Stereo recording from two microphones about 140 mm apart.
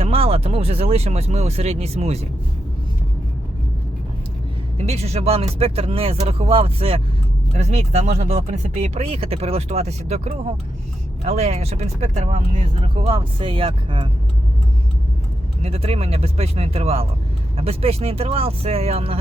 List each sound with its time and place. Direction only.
0.0 s speech: 45° right (ahead or behind)
4.8 s speech: 50° right (ahead or behind)
15.6 s speech: 45° right (ahead or behind)